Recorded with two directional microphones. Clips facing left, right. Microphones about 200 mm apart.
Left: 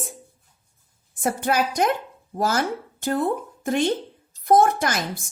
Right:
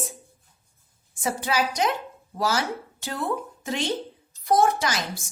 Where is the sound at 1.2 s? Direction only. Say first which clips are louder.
Left 3 dB; 55° left (ahead or behind).